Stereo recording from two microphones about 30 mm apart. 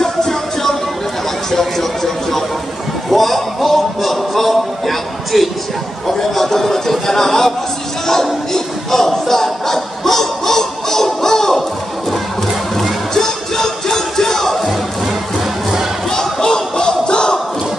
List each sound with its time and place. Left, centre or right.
0.0 s music: centre
1.5 s a sound: centre
3.1 s music: centre
6.0 s speech: centre
8.1 s a sound: centre
11.2 s music: centre
13.1 s music: centre
16.1 s crowd: centre